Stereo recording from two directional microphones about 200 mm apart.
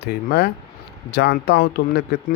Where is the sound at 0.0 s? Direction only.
50° left (ahead or behind).